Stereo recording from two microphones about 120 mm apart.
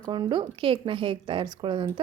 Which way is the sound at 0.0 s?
35° right (ahead or behind).